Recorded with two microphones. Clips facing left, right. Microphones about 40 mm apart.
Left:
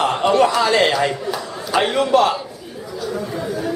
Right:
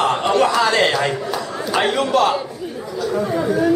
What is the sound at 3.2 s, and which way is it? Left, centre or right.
Speech, right.